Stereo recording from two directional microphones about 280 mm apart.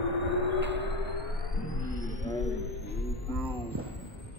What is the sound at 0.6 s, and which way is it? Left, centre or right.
Music, right.